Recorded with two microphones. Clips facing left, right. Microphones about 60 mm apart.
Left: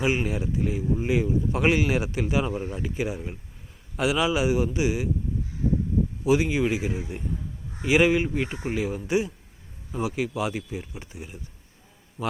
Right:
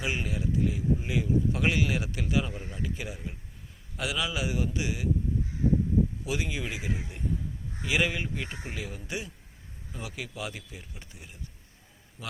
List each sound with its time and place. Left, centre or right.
0.0 s speech: left
2.5 s speech: left; by 5.0 s centre
6.2 s speech: left